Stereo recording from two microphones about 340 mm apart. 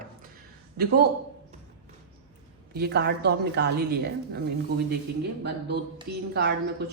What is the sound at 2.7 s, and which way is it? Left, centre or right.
Speech, right.